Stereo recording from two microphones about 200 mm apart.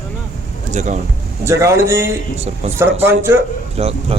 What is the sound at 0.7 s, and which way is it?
Speech, 35° right (ahead or behind).